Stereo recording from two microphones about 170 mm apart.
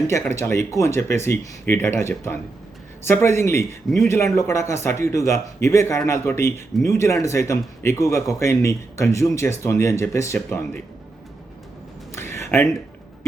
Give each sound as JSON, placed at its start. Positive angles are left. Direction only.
{"t": 0.1, "sound": "a man's voice", "side_deg": 15}
{"t": 3.8, "sound": "a man's voice", "side_deg": 0}
{"t": 4.1, "sound": "a man's voice", "side_deg": 15}
{"t": 12.1, "sound": "a sound", "side_deg": 15}